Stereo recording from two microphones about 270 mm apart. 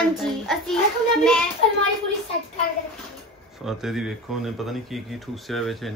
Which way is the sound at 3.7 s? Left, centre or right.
Centre.